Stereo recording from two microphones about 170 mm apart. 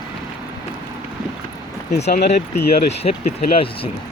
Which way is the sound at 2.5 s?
70° left (ahead or behind).